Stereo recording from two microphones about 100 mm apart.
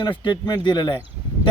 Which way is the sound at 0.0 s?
50° left (ahead or behind).